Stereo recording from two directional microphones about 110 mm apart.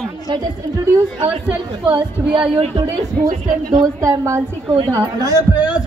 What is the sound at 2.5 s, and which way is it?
Speech, 65° right (ahead or behind).